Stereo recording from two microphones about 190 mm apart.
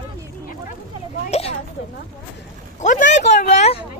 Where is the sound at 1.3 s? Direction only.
35° left (ahead or behind).